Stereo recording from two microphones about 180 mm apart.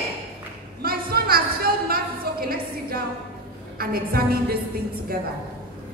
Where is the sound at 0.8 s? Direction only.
60° right (ahead or behind).